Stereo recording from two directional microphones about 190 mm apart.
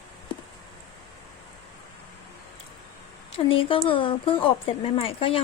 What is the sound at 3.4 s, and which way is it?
Speech, 30° left (ahead or behind).